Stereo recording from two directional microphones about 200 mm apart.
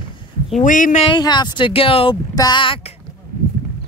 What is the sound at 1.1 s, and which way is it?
Speech, 20° left (ahead or behind).